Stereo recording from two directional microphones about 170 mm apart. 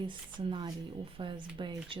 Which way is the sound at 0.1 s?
25° right (ahead or behind).